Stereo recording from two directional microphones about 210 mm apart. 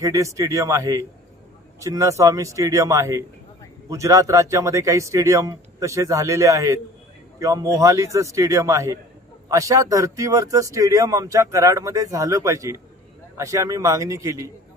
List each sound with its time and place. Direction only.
0.0 s speech: 15° right (ahead or behind)